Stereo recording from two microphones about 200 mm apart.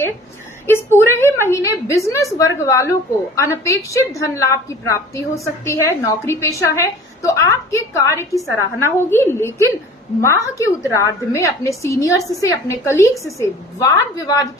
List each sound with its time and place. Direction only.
0.9 s a woman's voice: 10° left (ahead or behind)